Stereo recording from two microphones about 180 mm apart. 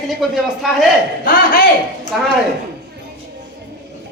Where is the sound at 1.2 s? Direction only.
50° left (ahead or behind).